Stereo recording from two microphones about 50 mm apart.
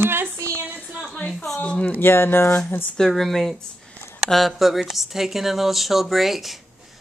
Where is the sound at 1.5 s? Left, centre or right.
Left.